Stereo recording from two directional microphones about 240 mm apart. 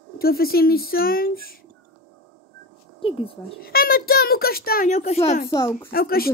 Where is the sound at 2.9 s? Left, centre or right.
Left.